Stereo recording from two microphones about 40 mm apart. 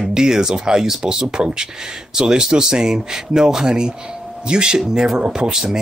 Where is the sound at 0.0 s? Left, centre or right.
Centre.